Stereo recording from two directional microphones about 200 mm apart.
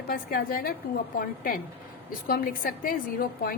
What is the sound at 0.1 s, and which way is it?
A woman's voice, 45° left (ahead or behind).